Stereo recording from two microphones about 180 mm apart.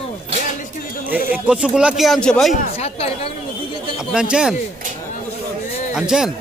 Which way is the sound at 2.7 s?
35° left (ahead or behind).